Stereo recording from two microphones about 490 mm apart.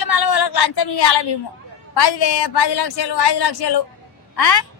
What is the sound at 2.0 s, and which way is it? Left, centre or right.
A woman's voice, left.